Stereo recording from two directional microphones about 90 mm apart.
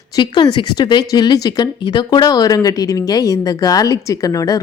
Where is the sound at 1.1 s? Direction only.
45° left (ahead or behind).